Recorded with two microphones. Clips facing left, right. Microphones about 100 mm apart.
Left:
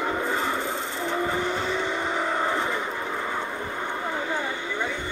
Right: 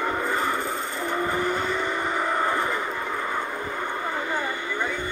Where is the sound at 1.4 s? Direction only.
20° left (ahead or behind).